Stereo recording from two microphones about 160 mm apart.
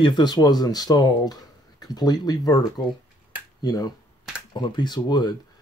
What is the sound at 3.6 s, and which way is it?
Speech, 25° left (ahead or behind).